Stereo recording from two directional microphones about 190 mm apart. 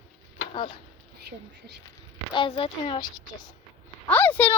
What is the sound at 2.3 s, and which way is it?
Speech, 25° left (ahead or behind).